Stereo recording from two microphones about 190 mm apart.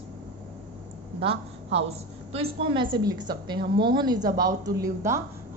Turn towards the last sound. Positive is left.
turn(degrees=-15)  # may be behind; listen again after turning